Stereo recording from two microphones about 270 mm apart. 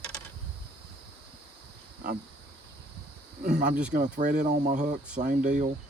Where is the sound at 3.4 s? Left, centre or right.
Right.